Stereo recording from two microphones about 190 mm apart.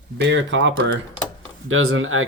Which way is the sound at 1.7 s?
90° right.